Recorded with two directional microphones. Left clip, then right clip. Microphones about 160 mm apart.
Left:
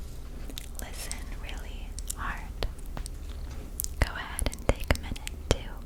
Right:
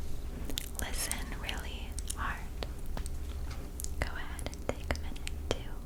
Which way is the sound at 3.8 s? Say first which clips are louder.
Left 7 dB; 30° left (ahead or behind).